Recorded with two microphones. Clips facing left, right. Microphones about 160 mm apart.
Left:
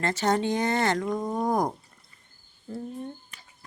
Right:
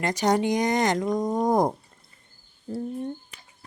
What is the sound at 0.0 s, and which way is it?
Speech, 15° right (ahead or behind).